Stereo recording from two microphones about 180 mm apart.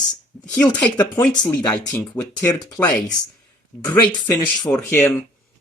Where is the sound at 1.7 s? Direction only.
10° left (ahead or behind).